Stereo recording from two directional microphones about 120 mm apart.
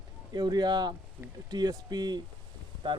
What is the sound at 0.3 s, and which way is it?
Speech, 35° right (ahead or behind).